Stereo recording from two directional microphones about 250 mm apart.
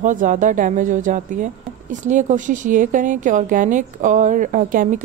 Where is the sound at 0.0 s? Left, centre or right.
Right.